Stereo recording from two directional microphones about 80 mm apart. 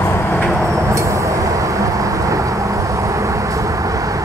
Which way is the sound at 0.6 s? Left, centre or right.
Right.